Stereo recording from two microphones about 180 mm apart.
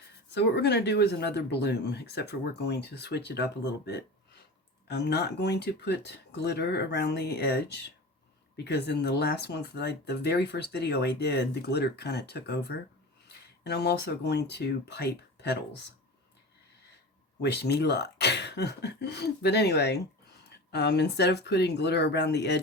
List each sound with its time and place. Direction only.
0.3 s speech: 65° left (ahead or behind)
17.4 s speech: 65° left (ahead or behind)